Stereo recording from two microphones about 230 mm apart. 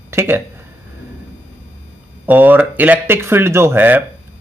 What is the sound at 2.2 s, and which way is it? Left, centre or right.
A man's voice, centre.